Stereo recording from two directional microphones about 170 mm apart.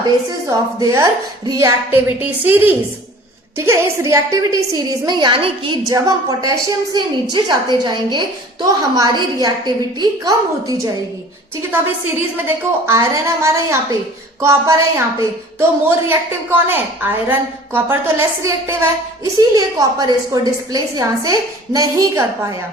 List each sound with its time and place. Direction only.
0.3 s a woman's voice: 20° right (ahead or behind)
12.5 s a woman's voice: 15° right (ahead or behind)